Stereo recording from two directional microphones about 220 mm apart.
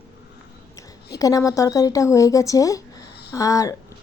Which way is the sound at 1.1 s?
15° left (ahead or behind).